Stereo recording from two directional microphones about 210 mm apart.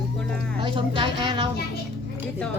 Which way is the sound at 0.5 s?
25° right (ahead or behind).